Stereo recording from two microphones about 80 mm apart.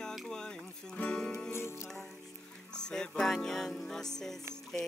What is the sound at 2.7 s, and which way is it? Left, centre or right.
Music, centre.